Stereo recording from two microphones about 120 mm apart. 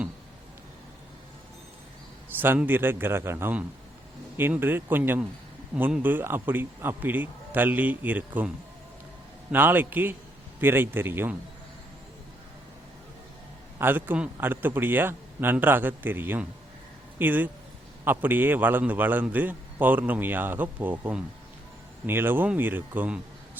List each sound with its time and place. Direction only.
2.4 s a man's voice: 15° right (ahead or behind)
9.5 s a man's voice: 15° right (ahead or behind)
13.7 s a man's voice: 15° right (ahead or behind)